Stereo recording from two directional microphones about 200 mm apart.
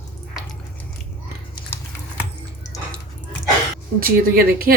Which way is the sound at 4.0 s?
50° right (ahead or behind).